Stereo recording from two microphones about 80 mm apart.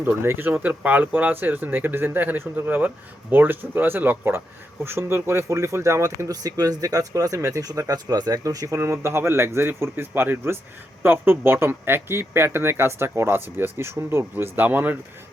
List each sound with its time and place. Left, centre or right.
0.0 s speech: right